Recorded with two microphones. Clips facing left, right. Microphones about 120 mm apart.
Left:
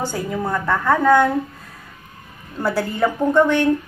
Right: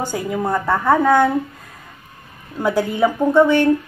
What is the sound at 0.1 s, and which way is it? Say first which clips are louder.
Speech: right 2 dB; 10° right (ahead or behind).